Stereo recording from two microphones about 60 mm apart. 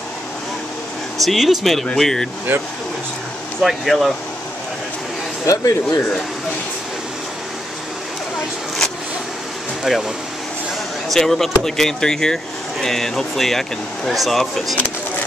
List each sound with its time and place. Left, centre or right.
1.2 s speech: centre
3.6 s speech: centre
5.5 s speech: left
9.9 s speech: centre
11.1 s speech: centre